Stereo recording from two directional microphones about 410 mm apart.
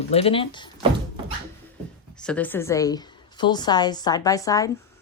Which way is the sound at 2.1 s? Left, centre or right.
Centre.